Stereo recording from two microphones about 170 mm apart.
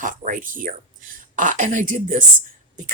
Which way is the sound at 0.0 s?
50° right (ahead or behind).